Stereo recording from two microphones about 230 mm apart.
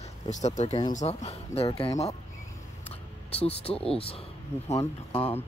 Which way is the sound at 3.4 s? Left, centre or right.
Left.